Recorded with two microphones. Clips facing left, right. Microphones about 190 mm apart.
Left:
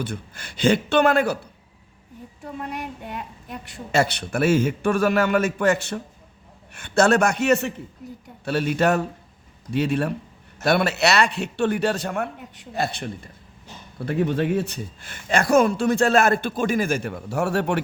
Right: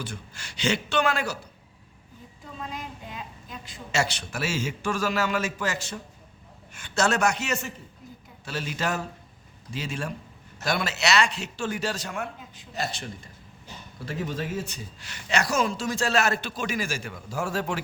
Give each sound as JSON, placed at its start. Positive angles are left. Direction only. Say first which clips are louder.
{"t": 0.0, "sound": "a man's voice", "louder": "left 7 dB", "side_deg": 55}
{"t": 2.4, "sound": "a man's voice", "louder": "left 6 dB", "side_deg": 65}